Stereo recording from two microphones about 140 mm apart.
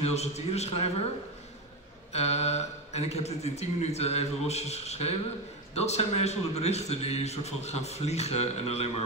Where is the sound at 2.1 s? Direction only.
50° left (ahead or behind).